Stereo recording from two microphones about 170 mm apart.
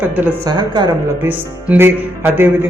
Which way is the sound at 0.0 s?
10° right (ahead or behind).